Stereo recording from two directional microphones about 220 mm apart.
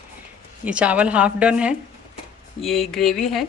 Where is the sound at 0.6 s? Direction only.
5° right (ahead or behind).